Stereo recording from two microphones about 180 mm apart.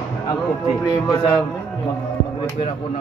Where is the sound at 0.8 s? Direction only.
25° left (ahead or behind).